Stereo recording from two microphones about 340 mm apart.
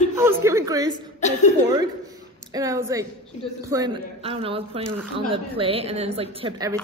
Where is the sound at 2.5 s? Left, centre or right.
Centre.